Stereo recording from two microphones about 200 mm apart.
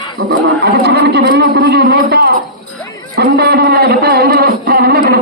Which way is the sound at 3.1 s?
55° right (ahead or behind).